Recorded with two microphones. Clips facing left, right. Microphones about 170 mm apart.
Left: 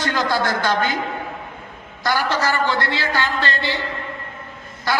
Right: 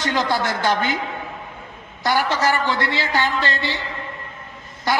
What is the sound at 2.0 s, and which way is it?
A man's voice, 15° right (ahead or behind).